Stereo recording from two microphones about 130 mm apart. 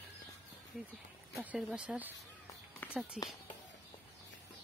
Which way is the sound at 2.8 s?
15° left (ahead or behind).